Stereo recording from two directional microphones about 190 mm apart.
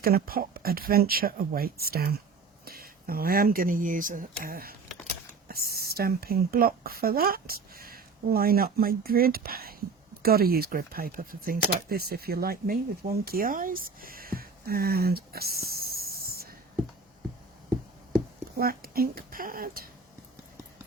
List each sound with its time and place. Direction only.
0.0 s speech: 50° right (ahead or behind)
18.5 s speech: 50° right (ahead or behind)